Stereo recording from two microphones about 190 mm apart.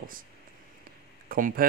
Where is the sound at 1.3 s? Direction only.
45° right (ahead or behind).